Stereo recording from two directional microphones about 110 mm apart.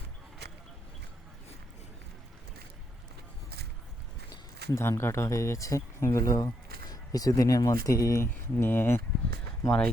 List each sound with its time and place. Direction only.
4.3 s speech: 25° left (ahead or behind)
9.6 s speech: 5° left (ahead or behind)